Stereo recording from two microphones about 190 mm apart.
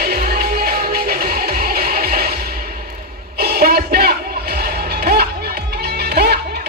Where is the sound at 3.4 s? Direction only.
55° right (ahead or behind).